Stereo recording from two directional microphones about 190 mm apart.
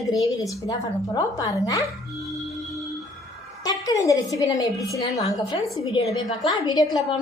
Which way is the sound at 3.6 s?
20° left (ahead or behind).